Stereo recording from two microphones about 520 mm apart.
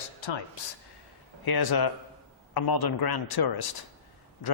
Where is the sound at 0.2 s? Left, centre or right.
Left.